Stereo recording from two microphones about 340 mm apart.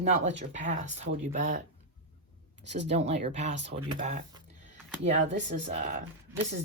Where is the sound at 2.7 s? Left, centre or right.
Centre.